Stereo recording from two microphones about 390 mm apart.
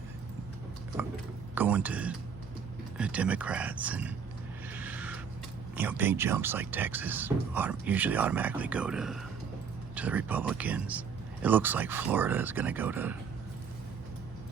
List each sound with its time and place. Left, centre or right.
1.5 s speech: centre
4.7 s a sound: centre
5.7 s speech: centre